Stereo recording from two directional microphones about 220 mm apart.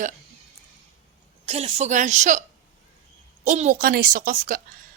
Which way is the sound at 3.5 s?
35° right (ahead or behind).